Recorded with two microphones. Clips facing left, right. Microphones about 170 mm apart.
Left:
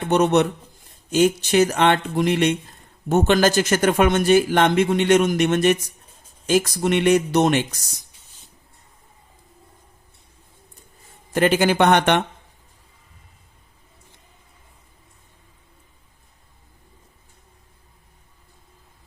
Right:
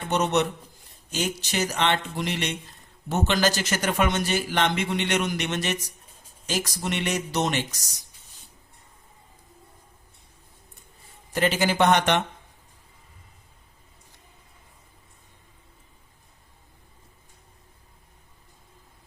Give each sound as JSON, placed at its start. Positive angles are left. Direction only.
{"t": 0.1, "sound": "speech", "side_deg": 55}
{"t": 11.3, "sound": "speech", "side_deg": 55}